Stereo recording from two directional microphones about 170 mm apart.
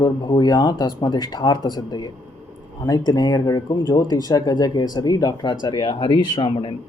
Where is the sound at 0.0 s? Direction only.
25° left (ahead or behind).